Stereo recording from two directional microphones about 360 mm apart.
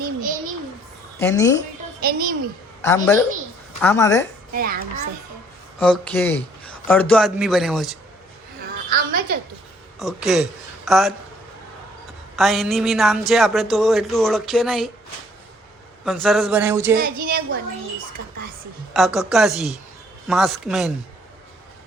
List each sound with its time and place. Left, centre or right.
1.2 s a woman's voice: centre
2.0 s a woman's voice: right
2.8 s a woman's voice: centre
4.5 s a child's voice: right
5.8 s a man's voice: centre
8.9 s a woman's voice: right
10.0 s a man's voice: centre
12.4 s a man's voice: centre
16.0 s a man's voice: centre
16.9 s a child's voice: right
18.9 s a man's voice: centre